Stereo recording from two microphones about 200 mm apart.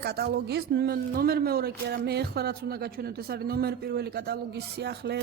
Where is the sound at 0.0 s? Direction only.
55° right (ahead or behind).